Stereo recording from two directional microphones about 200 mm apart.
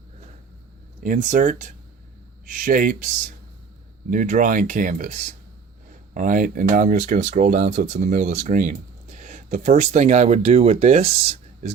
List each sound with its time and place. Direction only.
1.0 s speech: 40° right (ahead or behind)
4.1 s speech: 40° right (ahead or behind)